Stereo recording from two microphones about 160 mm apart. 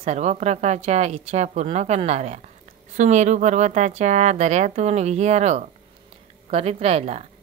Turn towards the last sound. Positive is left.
turn(degrees=-40)  # may be behind; listen again after turning